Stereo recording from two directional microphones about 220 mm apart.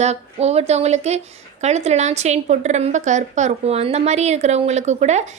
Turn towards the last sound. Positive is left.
turn(degrees=-30)  # may be behind; listen again after turning